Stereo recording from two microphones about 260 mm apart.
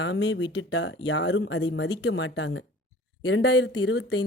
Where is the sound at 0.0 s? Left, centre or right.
Left.